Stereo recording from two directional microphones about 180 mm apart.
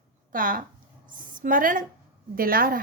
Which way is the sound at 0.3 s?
50° right (ahead or behind).